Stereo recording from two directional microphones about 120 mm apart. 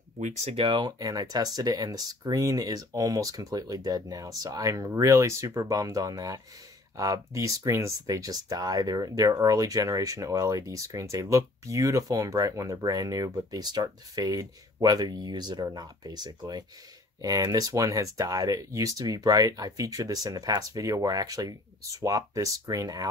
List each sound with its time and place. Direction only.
0.6 s speech: 40° right (ahead or behind)